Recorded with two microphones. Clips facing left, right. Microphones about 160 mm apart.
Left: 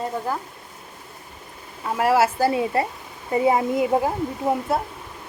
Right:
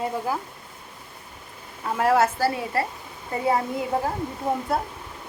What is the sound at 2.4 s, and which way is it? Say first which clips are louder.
A woman's voice: left 4 dB; 20° left (ahead or behind).